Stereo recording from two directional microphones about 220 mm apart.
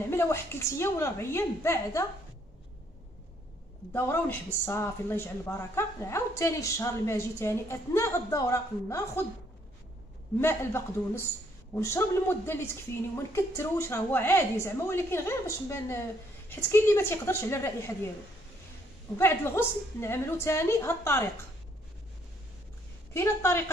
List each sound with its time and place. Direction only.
0.1 s speech: 10° left (ahead or behind)
3.9 s speech: 10° left (ahead or behind)
10.4 s speech: 10° left (ahead or behind)
19.1 s speech: 10° left (ahead or behind)
23.1 s speech: 10° left (ahead or behind)